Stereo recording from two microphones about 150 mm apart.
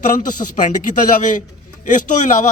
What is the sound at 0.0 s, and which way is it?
A man's voice, 60° left (ahead or behind).